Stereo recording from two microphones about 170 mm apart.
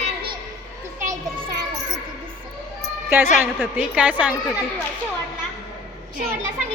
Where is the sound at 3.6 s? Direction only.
5° right (ahead or behind).